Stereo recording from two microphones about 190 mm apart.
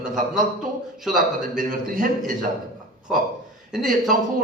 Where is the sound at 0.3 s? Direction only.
Centre (ahead or behind).